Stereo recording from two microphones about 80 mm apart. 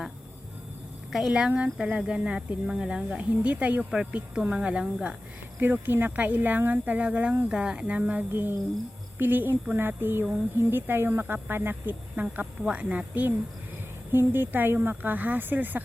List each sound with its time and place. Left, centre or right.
1.1 s speech: centre
1.5 s speech: centre
5.5 s speech: right